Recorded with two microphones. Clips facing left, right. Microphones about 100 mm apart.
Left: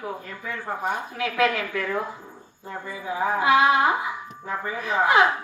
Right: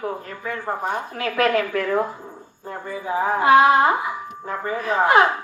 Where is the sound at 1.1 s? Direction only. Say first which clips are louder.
Right 4 dB; 50° right (ahead or behind).